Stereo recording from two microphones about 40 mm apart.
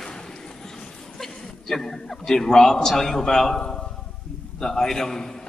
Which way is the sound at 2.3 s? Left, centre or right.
Centre.